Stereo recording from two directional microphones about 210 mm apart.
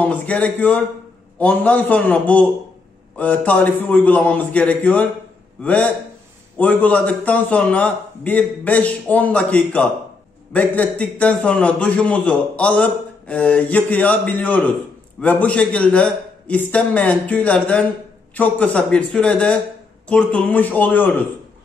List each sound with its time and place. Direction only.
0.0 s a man's voice: 5° left (ahead or behind)